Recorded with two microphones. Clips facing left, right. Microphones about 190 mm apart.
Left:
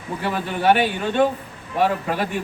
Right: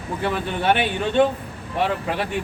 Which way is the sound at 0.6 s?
40° left (ahead or behind).